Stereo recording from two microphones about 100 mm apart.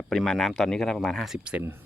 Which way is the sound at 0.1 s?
5° left (ahead or behind).